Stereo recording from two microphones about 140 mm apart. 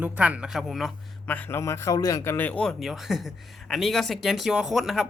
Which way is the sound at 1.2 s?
10° left (ahead or behind).